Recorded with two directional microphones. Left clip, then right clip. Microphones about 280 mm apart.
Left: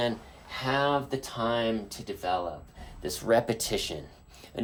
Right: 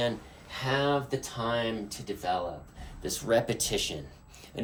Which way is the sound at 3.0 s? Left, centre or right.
Left.